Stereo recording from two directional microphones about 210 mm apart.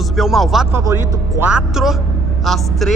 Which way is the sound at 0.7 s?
10° right (ahead or behind).